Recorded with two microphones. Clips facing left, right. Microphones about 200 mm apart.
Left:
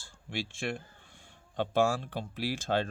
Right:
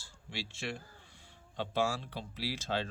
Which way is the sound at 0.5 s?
55° left (ahead or behind).